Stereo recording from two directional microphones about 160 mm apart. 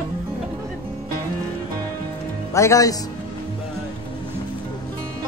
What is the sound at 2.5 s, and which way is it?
Speech, 20° left (ahead or behind).